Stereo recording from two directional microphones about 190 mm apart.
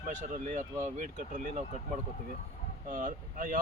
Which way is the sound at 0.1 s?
40° right (ahead or behind).